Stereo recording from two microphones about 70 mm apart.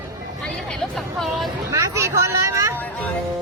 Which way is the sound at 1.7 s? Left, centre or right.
Right.